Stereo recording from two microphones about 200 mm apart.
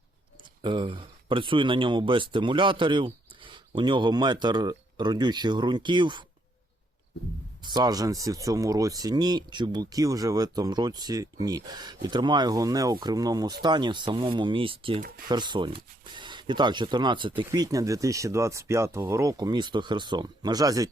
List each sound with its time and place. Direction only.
0.6 s speech: 25° right (ahead or behind)
7.6 s speech: 20° right (ahead or behind)